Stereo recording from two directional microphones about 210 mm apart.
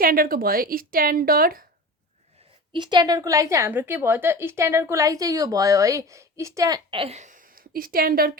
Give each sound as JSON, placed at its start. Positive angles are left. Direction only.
{"t": 0.0, "sound": "a woman's voice", "side_deg": -45}
{"t": 2.7, "sound": "a woman's voice", "side_deg": -20}